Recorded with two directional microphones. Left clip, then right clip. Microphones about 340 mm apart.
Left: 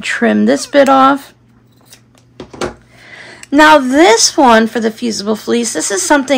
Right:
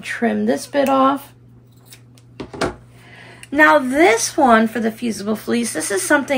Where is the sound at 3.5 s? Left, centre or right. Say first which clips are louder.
Left 6 dB; centre.